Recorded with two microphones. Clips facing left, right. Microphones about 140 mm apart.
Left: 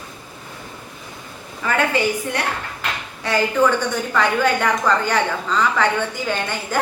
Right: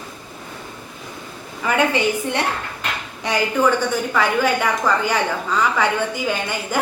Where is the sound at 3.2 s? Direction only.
15° right (ahead or behind).